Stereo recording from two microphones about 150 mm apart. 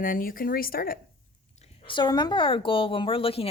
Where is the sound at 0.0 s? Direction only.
70° left (ahead or behind).